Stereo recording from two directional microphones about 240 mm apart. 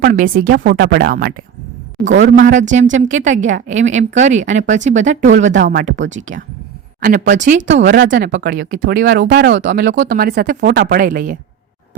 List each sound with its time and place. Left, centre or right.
0.0 s speech: right
2.0 s speech: right
2.3 s speech: right
3.2 s speech: right
3.4 s speech: right
6.1 s speech: right
8.4 s speech: right